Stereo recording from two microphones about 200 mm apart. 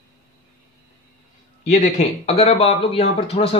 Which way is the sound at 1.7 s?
35° left (ahead or behind).